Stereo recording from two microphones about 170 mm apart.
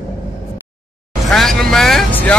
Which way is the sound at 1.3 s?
Centre (ahead or behind).